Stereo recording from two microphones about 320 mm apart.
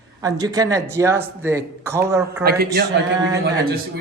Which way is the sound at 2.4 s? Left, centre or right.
Right.